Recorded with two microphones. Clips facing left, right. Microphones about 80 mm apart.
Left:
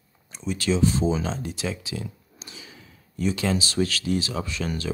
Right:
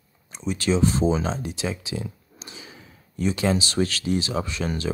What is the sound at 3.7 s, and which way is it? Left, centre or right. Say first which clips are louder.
Speech: right 1 dB; right.